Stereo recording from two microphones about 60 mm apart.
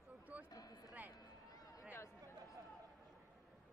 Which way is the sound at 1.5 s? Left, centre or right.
Left.